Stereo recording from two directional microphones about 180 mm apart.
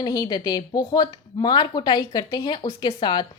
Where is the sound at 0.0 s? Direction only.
20° left (ahead or behind).